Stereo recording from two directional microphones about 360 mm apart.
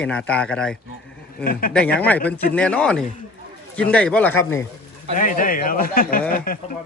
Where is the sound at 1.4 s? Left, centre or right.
Left.